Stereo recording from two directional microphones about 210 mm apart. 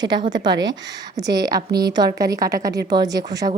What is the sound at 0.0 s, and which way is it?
Speech, 20° right (ahead or behind).